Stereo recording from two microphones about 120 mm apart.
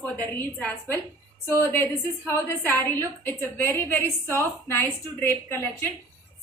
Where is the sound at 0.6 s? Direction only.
15° left (ahead or behind).